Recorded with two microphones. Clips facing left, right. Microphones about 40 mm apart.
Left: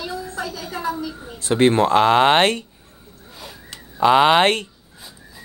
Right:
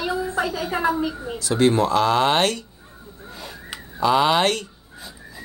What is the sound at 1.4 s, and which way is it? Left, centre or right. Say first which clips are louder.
Speech: left 3 dB; left.